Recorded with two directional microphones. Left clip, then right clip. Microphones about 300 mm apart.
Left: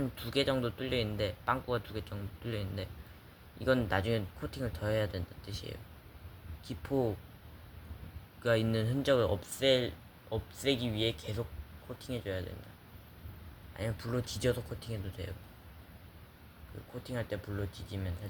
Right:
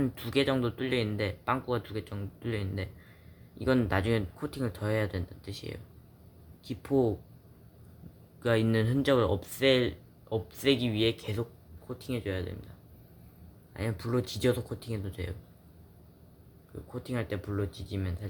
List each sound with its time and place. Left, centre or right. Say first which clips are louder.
0.0 s speech: right 4 dB; centre
8.4 s speech: right 3 dB; centre
13.7 s speech: right 5 dB; centre
17.0 s speech: right 3 dB; centre